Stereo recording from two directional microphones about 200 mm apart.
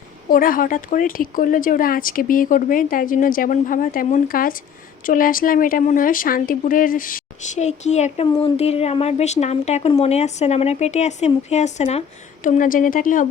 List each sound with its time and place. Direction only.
0.3 s a woman's voice: 45° left (ahead or behind)